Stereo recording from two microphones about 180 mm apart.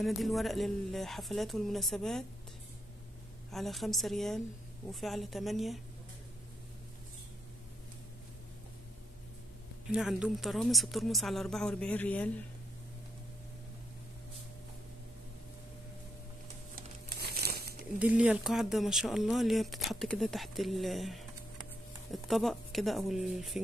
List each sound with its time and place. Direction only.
0.0 s speech: centre (ahead or behind)
3.5 s speech: centre (ahead or behind)
9.9 s speech: 5° right (ahead or behind)
17.2 s crumpling: 60° right (ahead or behind)
17.9 s speech: 5° right (ahead or behind)